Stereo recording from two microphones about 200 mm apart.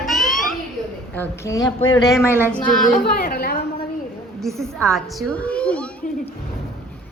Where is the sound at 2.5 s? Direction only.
5° left (ahead or behind).